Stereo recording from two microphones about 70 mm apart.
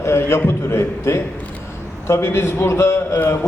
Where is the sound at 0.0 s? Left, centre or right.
Left.